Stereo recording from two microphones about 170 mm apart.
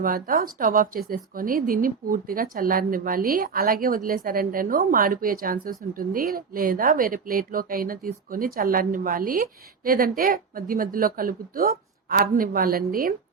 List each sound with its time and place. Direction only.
0.0 s a woman's voice: 55° right (ahead or behind)